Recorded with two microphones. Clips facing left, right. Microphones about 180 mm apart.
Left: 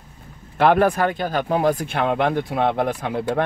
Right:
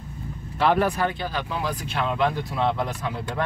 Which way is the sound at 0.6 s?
55° left (ahead or behind).